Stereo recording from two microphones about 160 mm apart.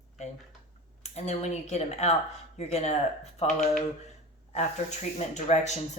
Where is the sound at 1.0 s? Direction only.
45° left (ahead or behind).